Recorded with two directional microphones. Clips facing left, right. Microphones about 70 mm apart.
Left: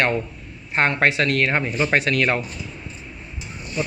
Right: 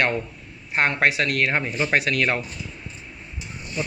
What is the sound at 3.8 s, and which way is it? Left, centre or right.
Speech, left.